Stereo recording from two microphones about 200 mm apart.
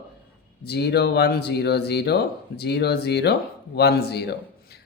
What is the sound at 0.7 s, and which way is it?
Speech, 55° left (ahead or behind).